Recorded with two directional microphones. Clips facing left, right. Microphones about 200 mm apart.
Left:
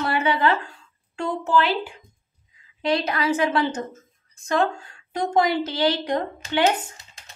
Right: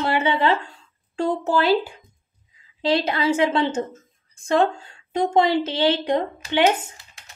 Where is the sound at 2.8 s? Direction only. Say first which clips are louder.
Right 2 dB; 30° right (ahead or behind).